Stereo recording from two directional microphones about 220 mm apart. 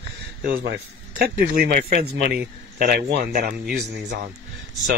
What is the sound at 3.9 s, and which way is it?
Speech, 50° right (ahead or behind).